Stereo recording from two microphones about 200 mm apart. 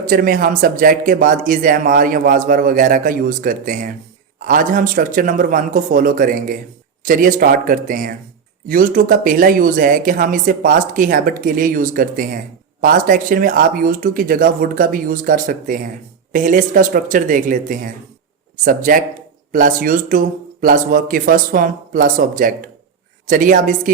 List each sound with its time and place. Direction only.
0.0 s speech: 45° right (ahead or behind)